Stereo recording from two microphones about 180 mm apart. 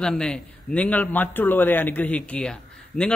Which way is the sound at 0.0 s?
5° left (ahead or behind).